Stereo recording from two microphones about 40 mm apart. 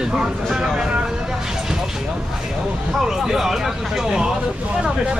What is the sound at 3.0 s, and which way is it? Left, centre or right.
Speech, centre.